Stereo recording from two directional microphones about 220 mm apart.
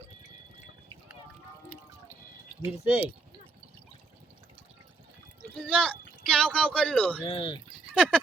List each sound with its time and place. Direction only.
2.6 s speech: 25° left (ahead or behind)
5.5 s a sound: 5° left (ahead or behind)
7.2 s speech: 25° left (ahead or behind)
7.9 s speech: centre (ahead or behind)